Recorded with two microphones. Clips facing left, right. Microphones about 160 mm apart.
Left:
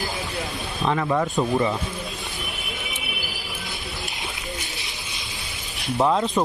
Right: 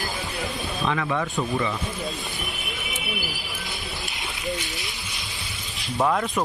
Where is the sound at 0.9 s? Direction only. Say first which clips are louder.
Left 4 dB; 35° left (ahead or behind).